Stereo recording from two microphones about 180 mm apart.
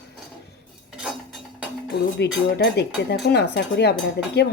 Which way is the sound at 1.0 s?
5° right (ahead or behind).